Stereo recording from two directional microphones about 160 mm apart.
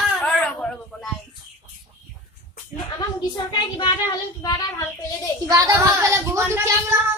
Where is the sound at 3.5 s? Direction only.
30° left (ahead or behind).